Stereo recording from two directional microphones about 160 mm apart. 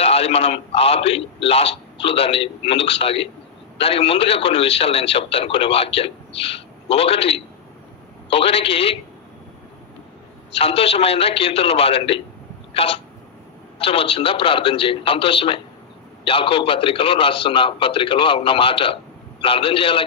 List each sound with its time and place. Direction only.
0.0 s a man's voice: 40° left (ahead or behind)
10.5 s a man's voice: 35° left (ahead or behind)
12.7 s hiccup: 35° left (ahead or behind)
13.7 s a man's voice: 35° left (ahead or behind)